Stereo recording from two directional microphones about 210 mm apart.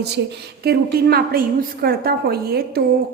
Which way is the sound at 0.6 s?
45° right (ahead or behind).